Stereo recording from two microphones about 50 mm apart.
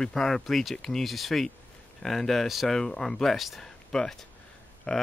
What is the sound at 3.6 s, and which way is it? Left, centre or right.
Speech, centre.